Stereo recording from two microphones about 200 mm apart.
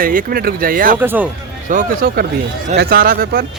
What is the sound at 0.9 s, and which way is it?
Speech, 10° right (ahead or behind).